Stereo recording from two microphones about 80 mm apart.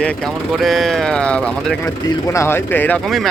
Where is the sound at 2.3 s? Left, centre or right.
Left.